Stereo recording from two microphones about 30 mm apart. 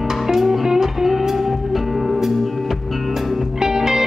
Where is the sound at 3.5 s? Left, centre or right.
Centre.